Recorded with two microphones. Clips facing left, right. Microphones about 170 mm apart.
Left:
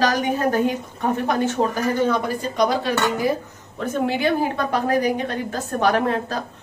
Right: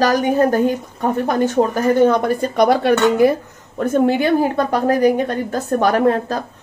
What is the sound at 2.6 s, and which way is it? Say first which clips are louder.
Speech: right 7 dB; 60° right (ahead or behind).